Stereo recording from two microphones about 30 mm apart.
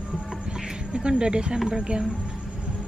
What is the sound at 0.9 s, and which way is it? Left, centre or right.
A woman's voice, right.